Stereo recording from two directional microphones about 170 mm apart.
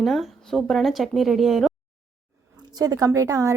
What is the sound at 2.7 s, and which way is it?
Speech, 20° right (ahead or behind).